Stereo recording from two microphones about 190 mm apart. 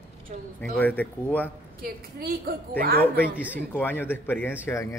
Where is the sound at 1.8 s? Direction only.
50° right (ahead or behind).